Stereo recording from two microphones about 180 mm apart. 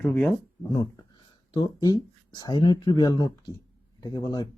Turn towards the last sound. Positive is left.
turn(degrees=20)  # may be behind; listen again after turning